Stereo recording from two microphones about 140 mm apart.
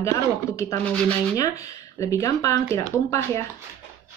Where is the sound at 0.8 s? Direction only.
10° left (ahead or behind).